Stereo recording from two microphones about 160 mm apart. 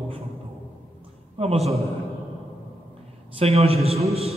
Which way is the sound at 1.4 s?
40° right (ahead or behind).